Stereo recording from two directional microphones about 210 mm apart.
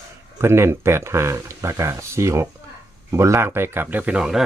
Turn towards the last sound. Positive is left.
turn(degrees=-5)  # may be behind; listen again after turning